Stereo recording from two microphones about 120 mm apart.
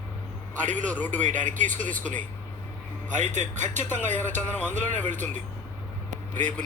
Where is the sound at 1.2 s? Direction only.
90° right.